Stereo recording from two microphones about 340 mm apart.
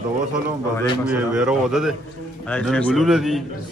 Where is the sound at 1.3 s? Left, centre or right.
Centre.